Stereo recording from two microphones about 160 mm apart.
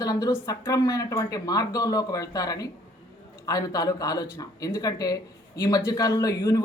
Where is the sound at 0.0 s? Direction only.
20° left (ahead or behind).